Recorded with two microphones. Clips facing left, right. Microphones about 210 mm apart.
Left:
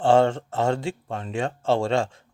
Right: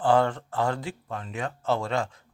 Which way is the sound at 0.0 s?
25° left (ahead or behind).